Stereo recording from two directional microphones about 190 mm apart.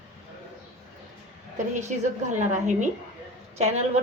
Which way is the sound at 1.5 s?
40° right (ahead or behind).